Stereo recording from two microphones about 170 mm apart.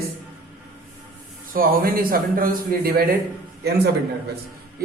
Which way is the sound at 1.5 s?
60° right (ahead or behind).